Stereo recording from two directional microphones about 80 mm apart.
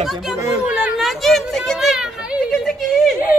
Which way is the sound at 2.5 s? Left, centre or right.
Centre.